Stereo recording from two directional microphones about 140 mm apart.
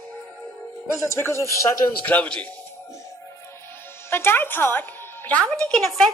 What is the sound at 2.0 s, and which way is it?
Speech, 10° left (ahead or behind).